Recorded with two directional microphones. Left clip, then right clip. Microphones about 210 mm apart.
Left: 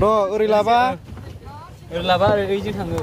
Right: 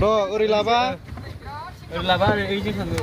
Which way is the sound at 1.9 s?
50° left (ahead or behind).